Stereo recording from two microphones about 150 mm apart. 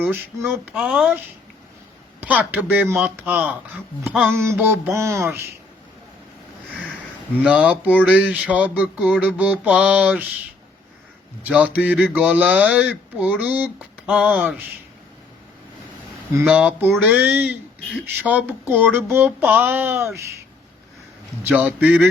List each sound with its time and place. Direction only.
0.4 s speech: 10° right (ahead or behind)
2.2 s speech: 10° right (ahead or behind)
4.1 s a sound: centre (ahead or behind)
4.4 s speech: 15° right (ahead or behind)
7.4 s speech: 10° right (ahead or behind)
11.4 s speech: 10° right (ahead or behind)
16.4 s speech: 10° right (ahead or behind)
21.5 s speech: 10° right (ahead or behind)